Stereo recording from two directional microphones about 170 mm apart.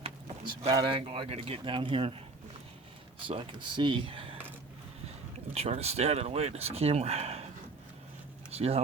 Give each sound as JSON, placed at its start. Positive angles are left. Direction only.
{"t": 0.7, "sound": "speech", "side_deg": -30}
{"t": 3.2, "sound": "speech", "side_deg": -30}
{"t": 5.5, "sound": "speech", "side_deg": -40}
{"t": 8.5, "sound": "speech", "side_deg": -35}